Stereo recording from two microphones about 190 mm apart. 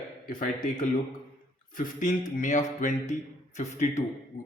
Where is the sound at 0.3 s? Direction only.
45° left (ahead or behind).